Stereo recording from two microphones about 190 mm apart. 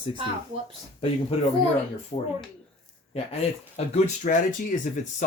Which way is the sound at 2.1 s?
30° left (ahead or behind).